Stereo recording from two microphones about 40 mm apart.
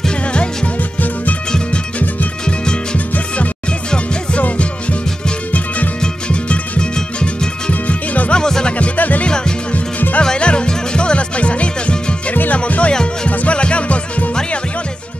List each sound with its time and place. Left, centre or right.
2.4 s music: left
5.9 s music: left
7.8 s music: left
8.4 s music: centre
8.7 s music: left
9.2 s music: left
9.7 s music: left
10.2 s music: left
12.9 s music: centre
13.3 s music: left